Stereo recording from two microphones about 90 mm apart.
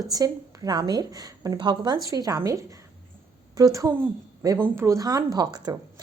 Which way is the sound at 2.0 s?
40° right (ahead or behind).